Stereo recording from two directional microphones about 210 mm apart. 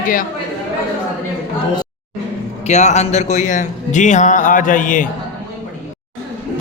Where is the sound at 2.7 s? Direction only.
35° left (ahead or behind).